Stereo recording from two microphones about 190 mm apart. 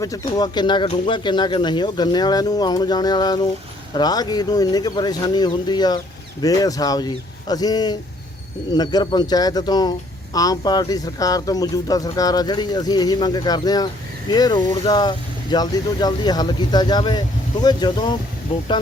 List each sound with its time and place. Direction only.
0.3 s speech: 20° left (ahead or behind)